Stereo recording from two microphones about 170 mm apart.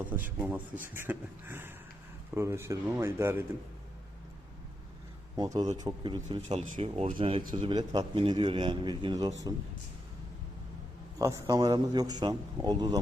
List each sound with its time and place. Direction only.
0.0 s a man's voice: 10° right (ahead or behind)
5.4 s a man's voice: 25° right (ahead or behind)
6.3 s a man's voice: 35° right (ahead or behind)
11.2 s a man's voice: 20° right (ahead or behind)